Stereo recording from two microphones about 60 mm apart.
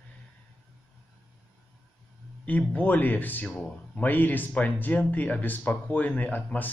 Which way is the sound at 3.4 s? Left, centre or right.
Centre.